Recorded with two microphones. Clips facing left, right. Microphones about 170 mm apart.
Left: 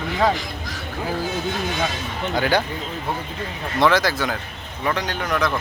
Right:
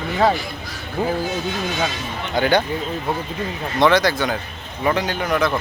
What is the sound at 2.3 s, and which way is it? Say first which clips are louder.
Speech: right 3 dB; centre (ahead or behind).